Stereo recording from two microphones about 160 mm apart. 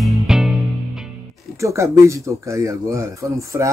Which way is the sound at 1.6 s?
20° right (ahead or behind).